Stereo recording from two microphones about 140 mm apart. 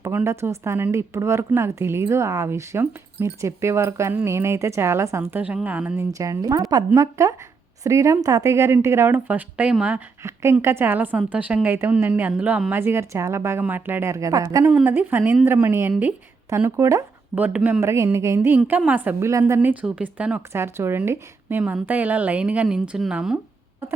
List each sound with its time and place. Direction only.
0.0 s a woman's voice: 15° right (ahead or behind)
6.0 s a woman's voice: 25° right (ahead or behind)
14.8 s a woman's voice: 15° right (ahead or behind)
19.5 s speech: 10° right (ahead or behind)